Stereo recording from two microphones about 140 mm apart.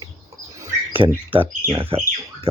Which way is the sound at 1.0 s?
35° right (ahead or behind).